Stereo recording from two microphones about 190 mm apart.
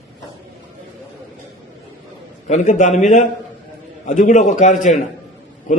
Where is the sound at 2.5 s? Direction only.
40° left (ahead or behind).